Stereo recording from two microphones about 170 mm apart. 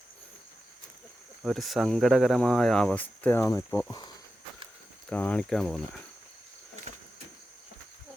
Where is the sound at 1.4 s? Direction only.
Centre (ahead or behind).